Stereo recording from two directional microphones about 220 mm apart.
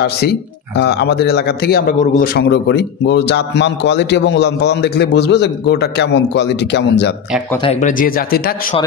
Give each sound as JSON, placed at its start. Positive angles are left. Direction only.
{"t": 0.0, "sound": "a man's voice", "side_deg": 50}
{"t": 7.6, "sound": "speech", "side_deg": 35}